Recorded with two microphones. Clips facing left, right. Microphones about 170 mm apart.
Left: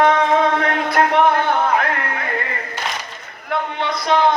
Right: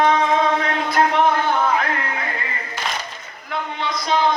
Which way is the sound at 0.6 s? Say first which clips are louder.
Left 2 dB; 60° left (ahead or behind).